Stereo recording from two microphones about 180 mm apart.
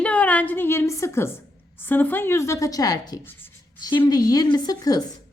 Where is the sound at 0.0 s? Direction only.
5° left (ahead or behind).